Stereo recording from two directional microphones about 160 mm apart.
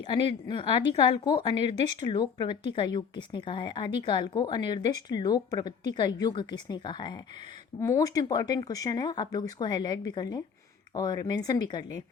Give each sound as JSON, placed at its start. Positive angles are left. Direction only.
{"t": 0.1, "sound": "speech", "side_deg": 30}